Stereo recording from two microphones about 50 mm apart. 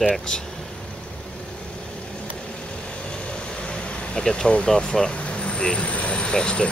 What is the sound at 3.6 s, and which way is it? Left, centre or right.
Vehicle, left.